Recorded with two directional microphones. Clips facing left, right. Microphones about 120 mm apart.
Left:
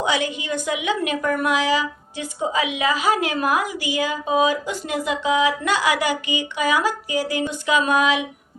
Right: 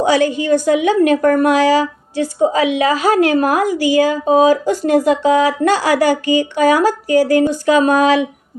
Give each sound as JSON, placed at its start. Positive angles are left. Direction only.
{"t": 0.0, "sound": "a woman's voice", "side_deg": -40}